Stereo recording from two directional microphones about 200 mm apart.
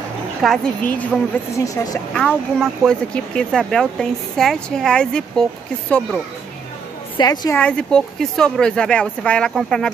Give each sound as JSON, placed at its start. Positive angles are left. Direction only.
{"t": 0.4, "sound": "a woman's voice", "side_deg": 5}
{"t": 2.1, "sound": "speech", "side_deg": 0}
{"t": 7.2, "sound": "a woman's voice", "side_deg": 20}
{"t": 7.5, "sound": "speech", "side_deg": 5}